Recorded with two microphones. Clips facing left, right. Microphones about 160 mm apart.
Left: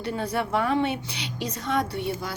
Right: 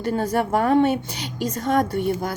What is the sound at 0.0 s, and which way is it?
Speech, 45° right (ahead or behind).